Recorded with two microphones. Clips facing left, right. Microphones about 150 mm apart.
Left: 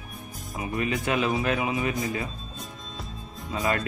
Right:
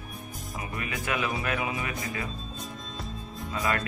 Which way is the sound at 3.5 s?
25° left (ahead or behind).